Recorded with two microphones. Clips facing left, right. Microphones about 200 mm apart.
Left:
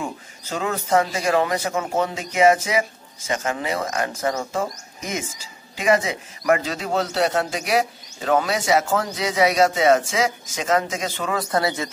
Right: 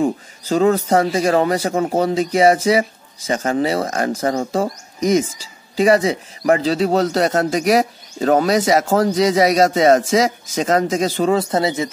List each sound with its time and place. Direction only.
0.0 s a man's voice: 35° right (ahead or behind); by 11.9 s 20° right (ahead or behind)